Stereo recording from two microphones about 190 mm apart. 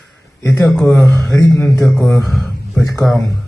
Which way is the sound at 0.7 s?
5° left (ahead or behind).